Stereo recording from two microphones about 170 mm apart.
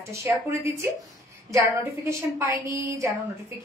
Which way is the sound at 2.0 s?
15° right (ahead or behind).